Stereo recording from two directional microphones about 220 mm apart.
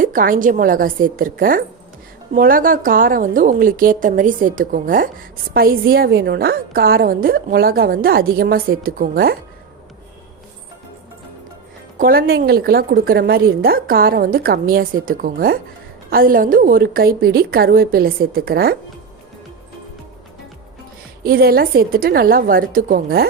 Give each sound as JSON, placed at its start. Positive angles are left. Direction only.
{"t": 0.0, "sound": "a woman's voice", "side_deg": -40}
{"t": 11.9, "sound": "a woman's voice", "side_deg": -40}
{"t": 21.2, "sound": "a woman's voice", "side_deg": -45}